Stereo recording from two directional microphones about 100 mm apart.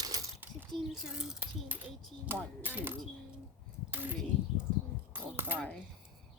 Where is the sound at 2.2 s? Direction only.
20° right (ahead or behind).